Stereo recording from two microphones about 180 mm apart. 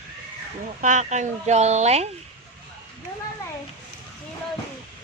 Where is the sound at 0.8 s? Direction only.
40° right (ahead or behind).